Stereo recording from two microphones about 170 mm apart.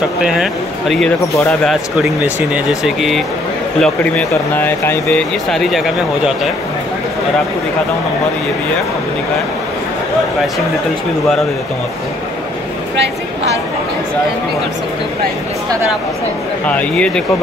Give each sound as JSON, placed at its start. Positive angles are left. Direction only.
{"t": 0.2, "sound": "speech", "side_deg": -5}
{"t": 1.2, "sound": "speech", "side_deg": 20}
{"t": 1.5, "sound": "speech", "side_deg": 0}
{"t": 16.6, "sound": "speech", "side_deg": 5}